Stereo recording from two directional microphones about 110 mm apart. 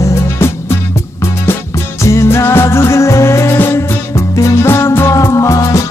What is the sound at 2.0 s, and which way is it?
Music, 25° left (ahead or behind).